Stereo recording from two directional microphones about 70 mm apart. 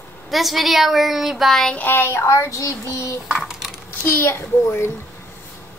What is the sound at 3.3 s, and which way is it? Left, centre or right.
Coin, centre.